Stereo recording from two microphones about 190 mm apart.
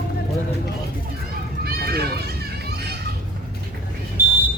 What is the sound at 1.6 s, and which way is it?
Run, 55° right (ahead or behind).